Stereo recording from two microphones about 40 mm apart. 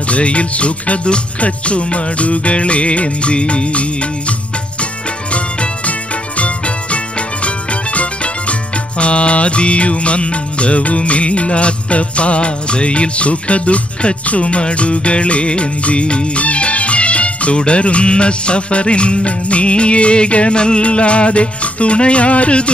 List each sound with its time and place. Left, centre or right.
0.1 s music: left
5.3 s music: left